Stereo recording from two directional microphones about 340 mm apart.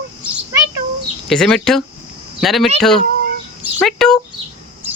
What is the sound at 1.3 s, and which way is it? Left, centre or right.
Speech, centre.